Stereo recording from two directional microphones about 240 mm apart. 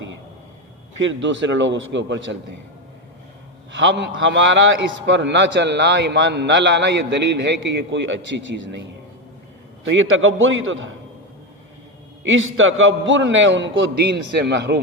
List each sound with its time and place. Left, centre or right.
1.0 s a man's voice: right
3.7 s a man's voice: right
9.9 s a man's voice: right
12.2 s a man's voice: right